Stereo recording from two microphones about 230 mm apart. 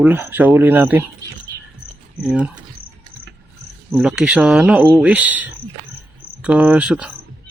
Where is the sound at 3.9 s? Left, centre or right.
Centre.